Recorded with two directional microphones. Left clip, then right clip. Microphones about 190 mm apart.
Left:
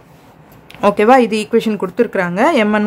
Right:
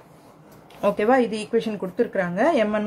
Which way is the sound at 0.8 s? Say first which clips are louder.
Left 9 dB; 50° left (ahead or behind).